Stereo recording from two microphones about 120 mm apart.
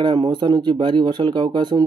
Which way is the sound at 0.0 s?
45° right (ahead or behind).